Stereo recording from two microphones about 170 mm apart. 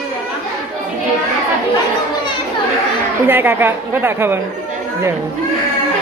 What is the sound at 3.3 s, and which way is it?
A woman's voice, 10° right (ahead or behind).